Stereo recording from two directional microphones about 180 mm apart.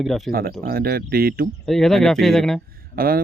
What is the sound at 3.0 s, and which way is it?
Speech, 55° right (ahead or behind).